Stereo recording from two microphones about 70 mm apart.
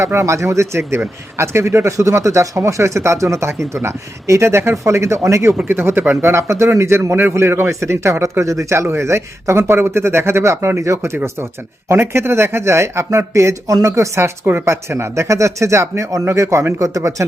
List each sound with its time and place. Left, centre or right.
0.0 s a man's voice: right
5.6 s speech: right
6.2 s a man's voice: right